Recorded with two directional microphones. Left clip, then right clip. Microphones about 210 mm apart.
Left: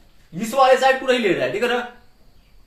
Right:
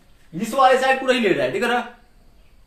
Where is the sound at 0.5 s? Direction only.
15° right (ahead or behind).